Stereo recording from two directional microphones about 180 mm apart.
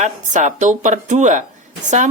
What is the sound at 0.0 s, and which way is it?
Speech, 40° right (ahead or behind).